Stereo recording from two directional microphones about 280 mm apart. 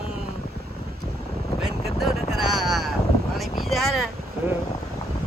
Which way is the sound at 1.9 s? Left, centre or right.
Centre.